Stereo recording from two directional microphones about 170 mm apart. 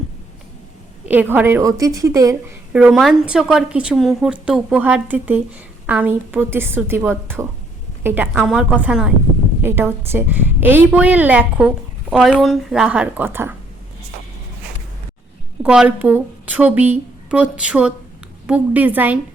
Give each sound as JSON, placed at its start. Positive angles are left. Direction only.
{"t": 1.0, "sound": "a woman's voice", "side_deg": -10}
{"t": 2.7, "sound": "a woman's voice", "side_deg": -5}
{"t": 15.6, "sound": "a woman's voice", "side_deg": -5}